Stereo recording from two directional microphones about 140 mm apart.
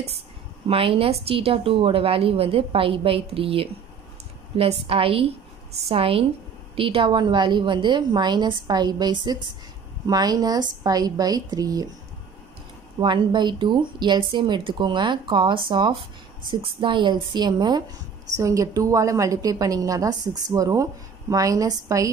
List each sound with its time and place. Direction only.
0.7 s a woman's voice: 40° right (ahead or behind); by 11.9 s 25° right (ahead or behind)
13.0 s a woman's voice: 35° right (ahead or behind)